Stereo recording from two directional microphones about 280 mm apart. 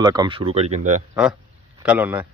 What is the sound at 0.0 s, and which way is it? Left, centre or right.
Speech, centre.